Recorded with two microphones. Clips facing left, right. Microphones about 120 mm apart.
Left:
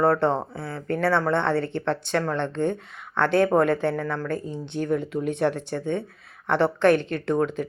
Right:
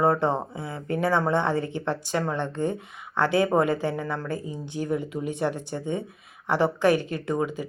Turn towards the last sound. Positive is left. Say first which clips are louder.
# left 3 dB
turn(degrees=-5)  # may be behind; listen again after turning